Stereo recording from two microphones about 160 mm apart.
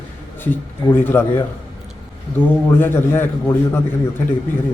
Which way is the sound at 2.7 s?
15° left (ahead or behind).